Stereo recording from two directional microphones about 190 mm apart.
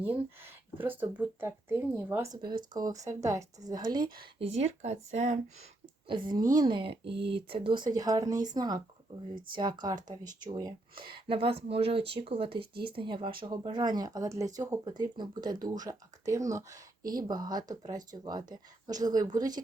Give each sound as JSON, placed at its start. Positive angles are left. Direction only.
{"t": 0.0, "sound": "speech", "side_deg": -10}
{"t": 6.1, "sound": "speech", "side_deg": -25}
{"t": 7.0, "sound": "speech", "side_deg": -65}
{"t": 7.3, "sound": "speech", "side_deg": -30}